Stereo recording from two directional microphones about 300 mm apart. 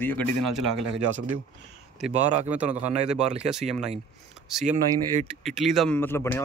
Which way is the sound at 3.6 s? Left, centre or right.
Right.